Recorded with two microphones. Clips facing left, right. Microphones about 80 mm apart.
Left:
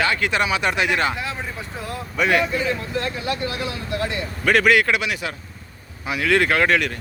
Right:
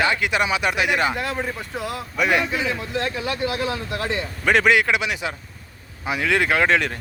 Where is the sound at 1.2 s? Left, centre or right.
Right.